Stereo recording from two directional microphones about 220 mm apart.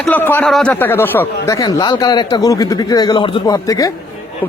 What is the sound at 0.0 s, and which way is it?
A man's voice, 10° left (ahead or behind).